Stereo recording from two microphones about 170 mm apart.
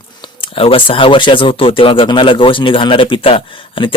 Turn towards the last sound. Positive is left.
turn(degrees=30)  # may be behind; listen again after turning